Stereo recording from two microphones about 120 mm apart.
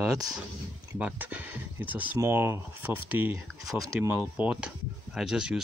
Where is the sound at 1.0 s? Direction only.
15° right (ahead or behind).